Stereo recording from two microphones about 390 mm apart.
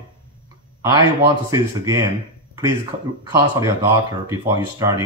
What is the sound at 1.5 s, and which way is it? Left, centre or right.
Speech, centre.